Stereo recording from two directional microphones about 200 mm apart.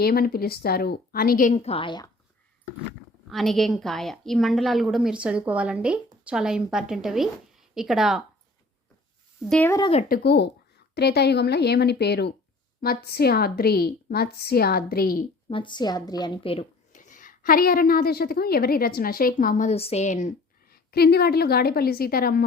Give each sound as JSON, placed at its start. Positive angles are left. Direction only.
{"t": 0.0, "sound": "a woman's voice", "side_deg": 50}
{"t": 3.2, "sound": "a woman's voice", "side_deg": 0}
{"t": 9.5, "sound": "speech", "side_deg": 10}
{"t": 9.8, "sound": "speech", "side_deg": 30}
{"t": 10.1, "sound": "a woman's voice", "side_deg": 55}
{"t": 15.4, "sound": "a woman's voice", "side_deg": 25}
{"t": 16.9, "sound": "a woman's voice", "side_deg": 40}